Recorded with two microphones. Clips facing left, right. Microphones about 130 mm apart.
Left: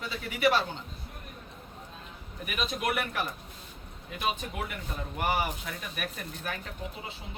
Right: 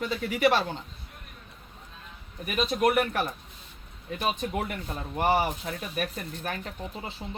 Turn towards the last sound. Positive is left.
turn(degrees=-40)  # may be behind; listen again after turning